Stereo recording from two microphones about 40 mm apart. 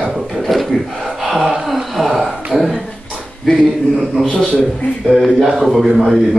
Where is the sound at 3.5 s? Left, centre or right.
Centre.